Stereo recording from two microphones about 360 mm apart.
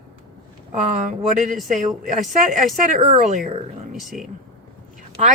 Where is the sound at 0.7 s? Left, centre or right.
Right.